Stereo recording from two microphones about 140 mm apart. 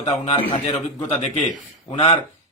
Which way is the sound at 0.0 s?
45° left (ahead or behind).